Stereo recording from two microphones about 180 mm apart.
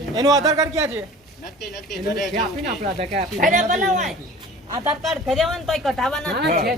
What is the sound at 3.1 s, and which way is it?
Speech, 50° right (ahead or behind).